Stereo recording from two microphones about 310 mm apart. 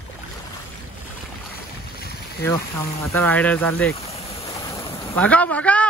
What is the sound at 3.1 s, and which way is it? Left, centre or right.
Speech, centre.